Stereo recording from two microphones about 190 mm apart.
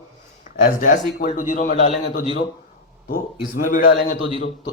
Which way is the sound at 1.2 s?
45° left (ahead or behind).